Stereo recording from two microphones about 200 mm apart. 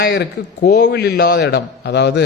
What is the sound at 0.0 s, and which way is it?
A man's voice, 55° left (ahead or behind).